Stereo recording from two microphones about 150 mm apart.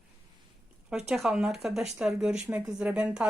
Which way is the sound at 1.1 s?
5° right (ahead or behind).